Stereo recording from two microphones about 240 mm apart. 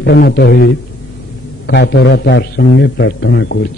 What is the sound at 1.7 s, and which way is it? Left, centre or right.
A man's voice, left.